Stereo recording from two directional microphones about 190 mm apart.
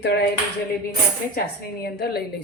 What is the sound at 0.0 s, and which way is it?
Speech, 60° left (ahead or behind).